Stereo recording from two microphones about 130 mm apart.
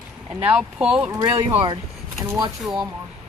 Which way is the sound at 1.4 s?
40° right (ahead or behind).